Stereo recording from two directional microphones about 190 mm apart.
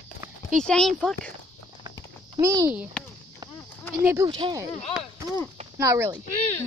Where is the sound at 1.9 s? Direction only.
20° right (ahead or behind).